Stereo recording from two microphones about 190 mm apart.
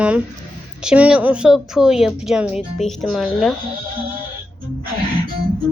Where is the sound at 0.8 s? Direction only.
5° right (ahead or behind).